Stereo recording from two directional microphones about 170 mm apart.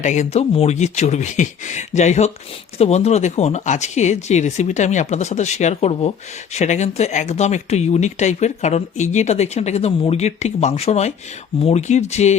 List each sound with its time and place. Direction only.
0.0 s speech: 40° left (ahead or behind)